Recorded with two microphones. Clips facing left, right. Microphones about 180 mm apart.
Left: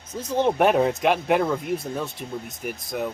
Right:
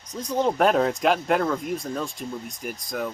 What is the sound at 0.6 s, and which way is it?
A child's voice, 5° left (ahead or behind).